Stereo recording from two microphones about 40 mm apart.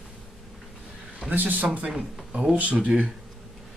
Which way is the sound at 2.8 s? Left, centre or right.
Right.